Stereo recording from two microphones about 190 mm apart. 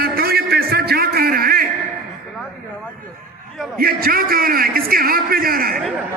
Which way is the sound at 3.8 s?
50° right (ahead or behind).